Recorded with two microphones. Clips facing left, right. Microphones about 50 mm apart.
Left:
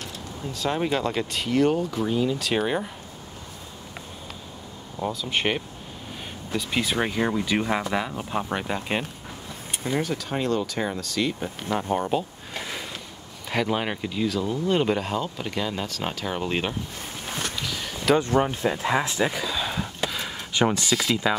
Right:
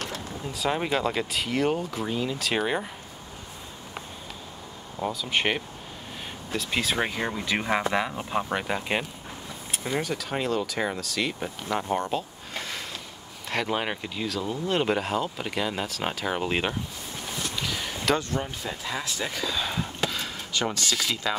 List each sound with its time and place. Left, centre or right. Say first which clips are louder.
0.5 s speech: left 1 dB; centre
4.9 s speech: even; centre
11.9 s a sound: left 3 dB; centre
13.5 s speech: left 2 dB; centre
17.6 s a sound: even; centre
18.3 s speech: left 9 dB; left
19.1 s speech: left 7 dB; centre
19.4 s a sound: left 1 dB; centre
20.5 s speech: left 5 dB; left